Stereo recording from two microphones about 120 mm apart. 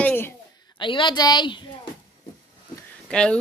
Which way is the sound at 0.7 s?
40° left (ahead or behind).